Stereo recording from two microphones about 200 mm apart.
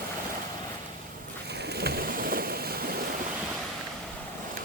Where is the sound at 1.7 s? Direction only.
50° right (ahead or behind).